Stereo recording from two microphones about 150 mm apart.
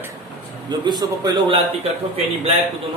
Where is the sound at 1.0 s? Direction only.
30° right (ahead or behind).